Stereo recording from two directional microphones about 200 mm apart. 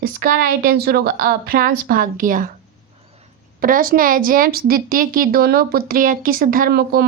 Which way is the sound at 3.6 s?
45° right (ahead or behind).